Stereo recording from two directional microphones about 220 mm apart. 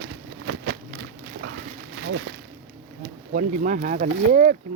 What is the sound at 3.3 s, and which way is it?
Speech, 35° right (ahead or behind).